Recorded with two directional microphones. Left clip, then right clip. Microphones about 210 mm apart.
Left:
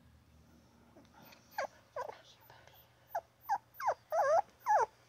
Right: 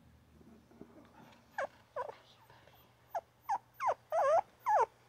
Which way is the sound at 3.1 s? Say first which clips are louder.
Left 1 dB; 10° right (ahead or behind).